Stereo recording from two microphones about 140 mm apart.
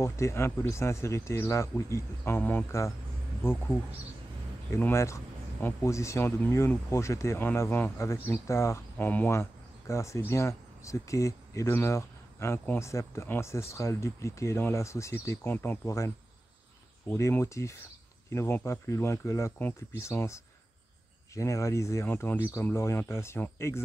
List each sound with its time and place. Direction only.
0.0 s speech: 20° left (ahead or behind)
4.7 s speech: 15° left (ahead or behind)
17.1 s speech: 20° left (ahead or behind)